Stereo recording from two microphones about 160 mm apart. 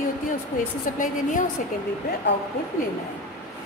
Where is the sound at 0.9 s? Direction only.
55° left (ahead or behind).